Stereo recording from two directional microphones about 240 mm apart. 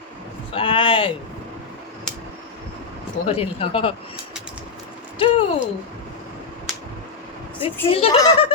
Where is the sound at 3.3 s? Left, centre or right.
Left.